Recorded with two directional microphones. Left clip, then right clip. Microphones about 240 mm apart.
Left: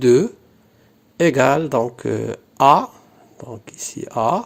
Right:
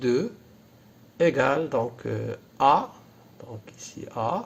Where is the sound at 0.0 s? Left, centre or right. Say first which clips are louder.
Left 11 dB; left.